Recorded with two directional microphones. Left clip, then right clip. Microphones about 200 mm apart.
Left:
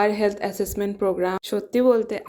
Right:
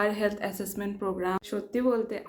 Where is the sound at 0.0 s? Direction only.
35° left (ahead or behind).